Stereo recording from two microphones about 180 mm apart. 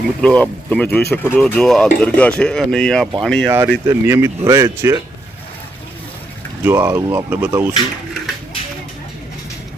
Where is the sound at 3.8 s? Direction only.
15° right (ahead or behind).